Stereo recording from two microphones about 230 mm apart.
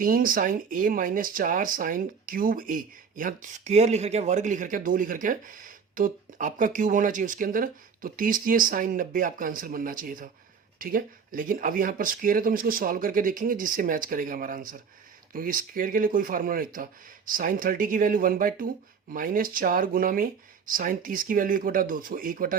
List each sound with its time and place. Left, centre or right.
0.0 s speech: right